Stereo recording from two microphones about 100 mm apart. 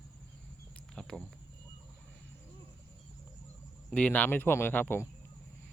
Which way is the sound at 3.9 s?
15° left (ahead or behind).